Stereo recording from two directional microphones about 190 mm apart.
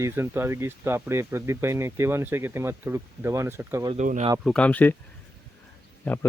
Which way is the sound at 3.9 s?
40° right (ahead or behind).